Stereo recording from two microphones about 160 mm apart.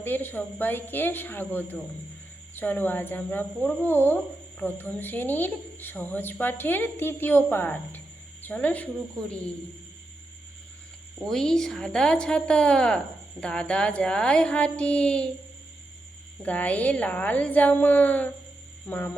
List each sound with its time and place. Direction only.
0.0 s a woman's voice: 10° left (ahead or behind)
11.3 s a woman's voice: 5° left (ahead or behind)
16.4 s a woman's voice: 10° left (ahead or behind)